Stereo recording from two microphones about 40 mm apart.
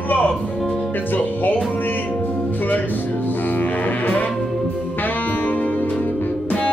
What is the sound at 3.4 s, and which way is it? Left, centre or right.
Music, left.